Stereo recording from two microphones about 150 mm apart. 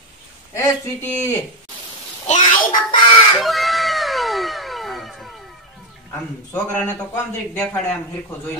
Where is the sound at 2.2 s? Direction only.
55° left (ahead or behind).